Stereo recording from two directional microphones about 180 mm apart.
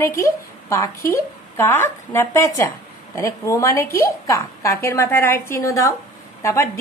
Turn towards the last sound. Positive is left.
turn(degrees=15)  # may be behind; listen again after turning